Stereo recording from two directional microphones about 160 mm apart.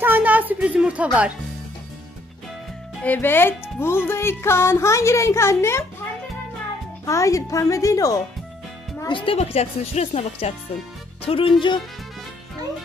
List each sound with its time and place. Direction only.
0.0 s music: 10° right (ahead or behind)
3.0 s speech: 10° left (ahead or behind)
7.1 s speech: 20° left (ahead or behind)
9.0 s a woman's voice: 35° left (ahead or behind)